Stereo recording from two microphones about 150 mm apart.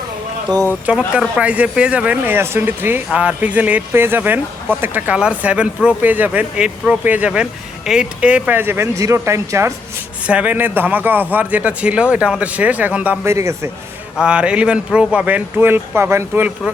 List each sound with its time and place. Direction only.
0.5 s speech: 30° right (ahead or behind)
0.9 s speech: 5° right (ahead or behind)
14.2 s speech: 5° right (ahead or behind)